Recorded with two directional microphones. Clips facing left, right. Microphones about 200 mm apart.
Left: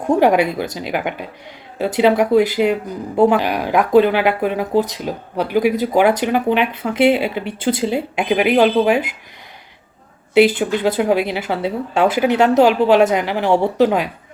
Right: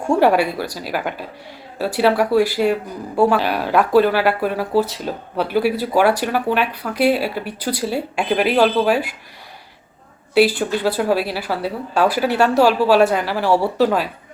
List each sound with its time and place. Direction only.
0.0 s speech: 15° left (ahead or behind)
10.3 s speech: 20° left (ahead or behind)